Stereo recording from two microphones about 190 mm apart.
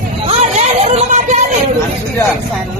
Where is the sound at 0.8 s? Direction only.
35° right (ahead or behind).